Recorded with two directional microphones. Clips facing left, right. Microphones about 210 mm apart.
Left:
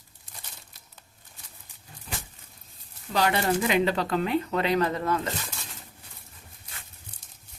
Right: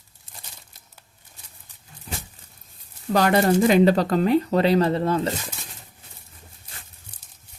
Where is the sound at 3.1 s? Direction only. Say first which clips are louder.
Right 6 dB; 45° right (ahead or behind); by 5.3 s 30° right (ahead or behind).